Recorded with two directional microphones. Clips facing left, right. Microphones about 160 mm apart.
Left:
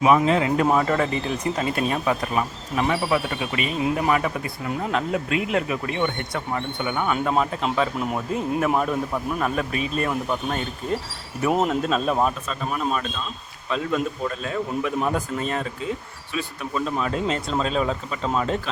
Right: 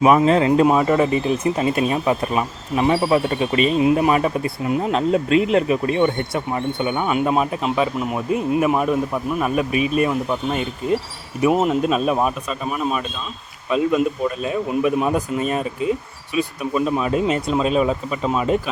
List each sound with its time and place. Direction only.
0.3 s speech: 35° right (ahead or behind)
0.6 s speech: 15° right (ahead or behind)